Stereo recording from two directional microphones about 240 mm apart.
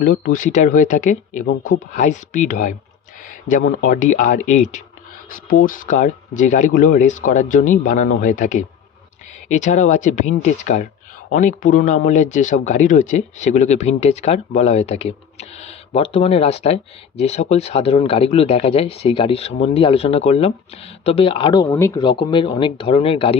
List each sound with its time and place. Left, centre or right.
0.0 s speech: left